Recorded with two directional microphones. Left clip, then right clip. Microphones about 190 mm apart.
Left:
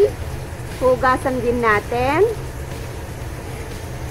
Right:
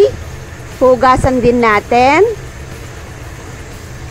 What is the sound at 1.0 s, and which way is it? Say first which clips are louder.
Speech: right 8 dB; 50° right (ahead or behind).